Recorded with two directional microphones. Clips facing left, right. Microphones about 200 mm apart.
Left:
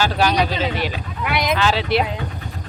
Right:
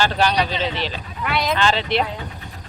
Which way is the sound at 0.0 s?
5° left (ahead or behind).